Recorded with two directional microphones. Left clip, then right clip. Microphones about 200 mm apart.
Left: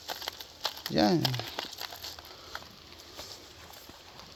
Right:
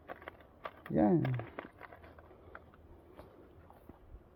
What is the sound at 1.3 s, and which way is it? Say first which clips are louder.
Crumpling: left 9 dB; 20° right (ahead or behind).